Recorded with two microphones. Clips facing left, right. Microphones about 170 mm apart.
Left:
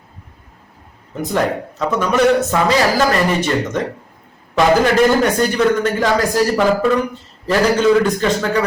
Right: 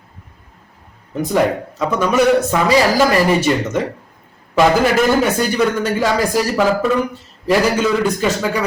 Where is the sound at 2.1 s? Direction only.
10° right (ahead or behind).